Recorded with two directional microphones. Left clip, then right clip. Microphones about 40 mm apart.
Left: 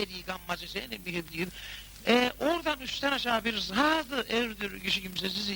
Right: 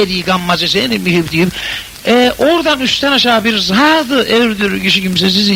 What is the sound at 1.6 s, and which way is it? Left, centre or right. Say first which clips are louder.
A man's voice: right 15 dB; left.